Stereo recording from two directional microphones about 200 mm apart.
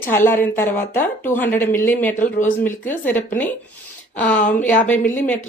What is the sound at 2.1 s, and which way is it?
Speech, 40° left (ahead or behind).